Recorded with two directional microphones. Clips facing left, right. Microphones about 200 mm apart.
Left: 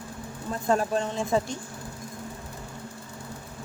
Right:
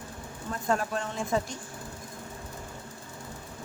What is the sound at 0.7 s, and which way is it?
Speech, 30° left (ahead or behind).